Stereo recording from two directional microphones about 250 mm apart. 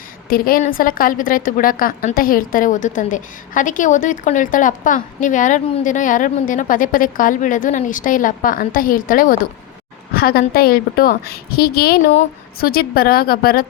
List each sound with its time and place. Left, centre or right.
0.3 s a woman's voice: left